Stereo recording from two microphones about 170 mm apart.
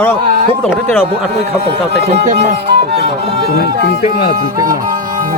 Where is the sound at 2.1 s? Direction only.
45° right (ahead or behind).